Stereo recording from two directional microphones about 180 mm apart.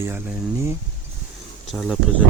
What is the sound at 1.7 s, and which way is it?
Speech, centre (ahead or behind).